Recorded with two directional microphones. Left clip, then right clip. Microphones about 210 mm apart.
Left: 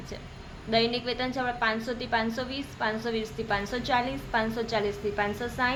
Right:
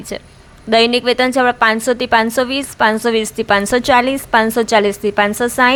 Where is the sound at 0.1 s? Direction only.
55° right (ahead or behind).